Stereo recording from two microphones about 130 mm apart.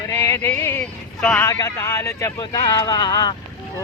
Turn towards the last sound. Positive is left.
turn(degrees=35)  # may be behind; listen again after turning